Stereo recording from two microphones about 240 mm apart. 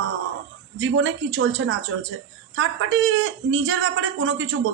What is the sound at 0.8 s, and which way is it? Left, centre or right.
Speech, right.